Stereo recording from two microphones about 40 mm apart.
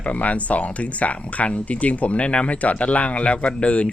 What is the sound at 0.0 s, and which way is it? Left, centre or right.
Speech, left.